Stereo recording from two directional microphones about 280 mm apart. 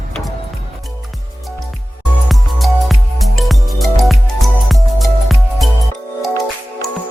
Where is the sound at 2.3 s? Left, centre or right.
Centre.